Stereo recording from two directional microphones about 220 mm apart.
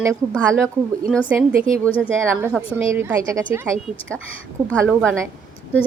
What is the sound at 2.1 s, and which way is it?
Speech, 10° right (ahead or behind).